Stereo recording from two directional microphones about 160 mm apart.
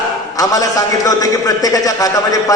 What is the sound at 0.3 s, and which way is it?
A man's voice, 20° left (ahead or behind).